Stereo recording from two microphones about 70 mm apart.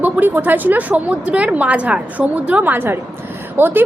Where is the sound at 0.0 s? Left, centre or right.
Right.